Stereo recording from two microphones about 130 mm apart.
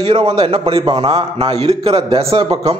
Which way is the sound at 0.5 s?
50° right (ahead or behind).